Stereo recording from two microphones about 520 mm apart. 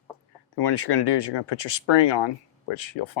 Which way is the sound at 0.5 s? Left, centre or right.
Left.